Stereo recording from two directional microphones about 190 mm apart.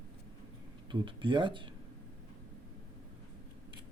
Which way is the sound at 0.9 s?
25° right (ahead or behind).